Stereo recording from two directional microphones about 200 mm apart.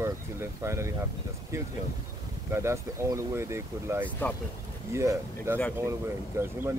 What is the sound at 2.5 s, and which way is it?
Speech, 15° right (ahead or behind).